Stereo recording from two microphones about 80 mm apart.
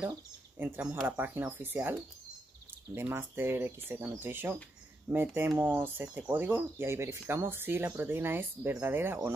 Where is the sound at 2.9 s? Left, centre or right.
Right.